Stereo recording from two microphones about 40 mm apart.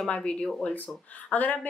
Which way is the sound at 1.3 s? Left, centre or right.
Left.